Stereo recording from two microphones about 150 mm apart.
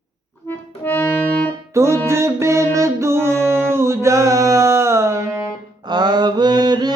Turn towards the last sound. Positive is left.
turn(degrees=-30)  # may be behind; listen again after turning